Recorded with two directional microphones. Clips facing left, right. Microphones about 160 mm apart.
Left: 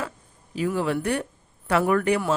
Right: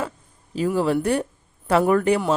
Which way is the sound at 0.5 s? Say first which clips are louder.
Right 4 dB; 35° right (ahead or behind).